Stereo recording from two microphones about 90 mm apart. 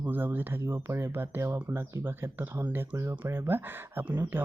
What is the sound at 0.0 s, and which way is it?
Speech, 20° right (ahead or behind).